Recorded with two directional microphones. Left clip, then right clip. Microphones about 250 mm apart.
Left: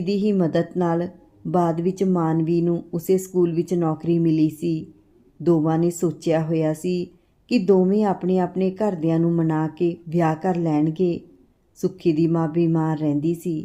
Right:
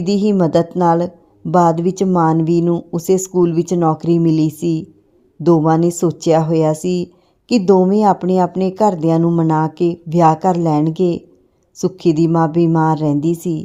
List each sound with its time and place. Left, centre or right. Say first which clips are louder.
0.0 s speech: right 6 dB; right